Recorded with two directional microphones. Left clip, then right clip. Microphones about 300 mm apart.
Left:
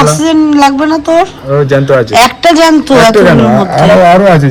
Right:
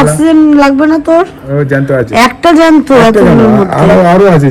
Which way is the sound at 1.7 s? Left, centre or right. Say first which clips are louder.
Left 2 dB; left.